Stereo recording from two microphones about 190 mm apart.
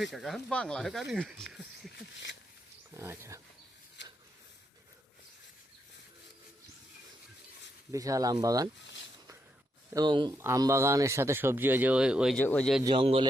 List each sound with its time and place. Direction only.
0.1 s speech: centre (ahead or behind)
2.0 s a sound: 70° left (ahead or behind)
2.9 s wild animals: 15° right (ahead or behind)
7.9 s speech: 15° right (ahead or behind)
9.9 s speech: 25° right (ahead or behind); by 12.4 s 5° right (ahead or behind)
12.4 s speech: 10° left (ahead or behind)
12.8 s speech: 25° right (ahead or behind)